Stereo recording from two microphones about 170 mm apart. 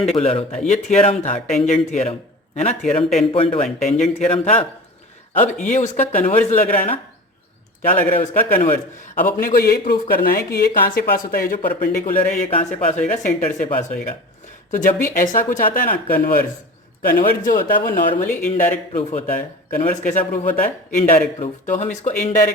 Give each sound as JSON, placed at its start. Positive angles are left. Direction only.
{"t": 0.0, "sound": "speech", "side_deg": 35}
{"t": 5.5, "sound": "a man's voice", "side_deg": 45}
{"t": 7.8, "sound": "a man's voice", "side_deg": 55}
{"t": 13.0, "sound": "a man's voice", "side_deg": 45}
{"t": 18.3, "sound": "a man's voice", "side_deg": 45}